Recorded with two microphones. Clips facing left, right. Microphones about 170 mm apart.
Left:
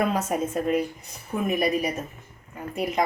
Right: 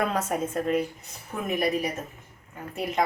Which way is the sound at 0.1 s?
10° left (ahead or behind).